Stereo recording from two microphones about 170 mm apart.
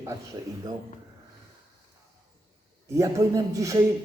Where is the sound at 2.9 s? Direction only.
20° right (ahead or behind).